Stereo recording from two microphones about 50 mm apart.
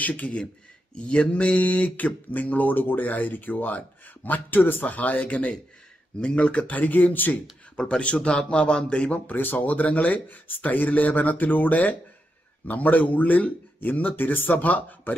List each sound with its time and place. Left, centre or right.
0.0 s speech: left
7.7 s a man's voice: centre
9.3 s speech: left